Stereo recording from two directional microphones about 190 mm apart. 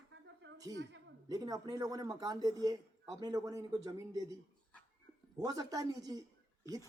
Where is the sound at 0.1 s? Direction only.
75° right (ahead or behind).